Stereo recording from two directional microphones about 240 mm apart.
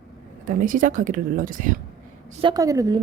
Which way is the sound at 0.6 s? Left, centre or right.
Right.